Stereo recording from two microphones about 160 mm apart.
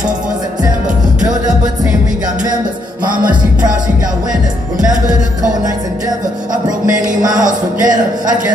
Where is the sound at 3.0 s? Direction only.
60° right (ahead or behind).